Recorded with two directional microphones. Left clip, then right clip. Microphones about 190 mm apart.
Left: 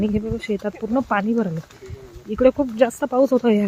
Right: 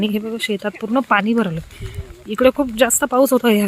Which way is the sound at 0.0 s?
5° right (ahead or behind).